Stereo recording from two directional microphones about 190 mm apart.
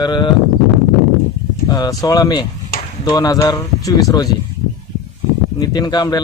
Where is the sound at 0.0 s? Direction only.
25° left (ahead or behind).